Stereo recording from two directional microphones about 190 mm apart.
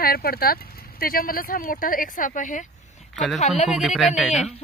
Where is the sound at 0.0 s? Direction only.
55° left (ahead or behind); by 3.6 s 35° left (ahead or behind).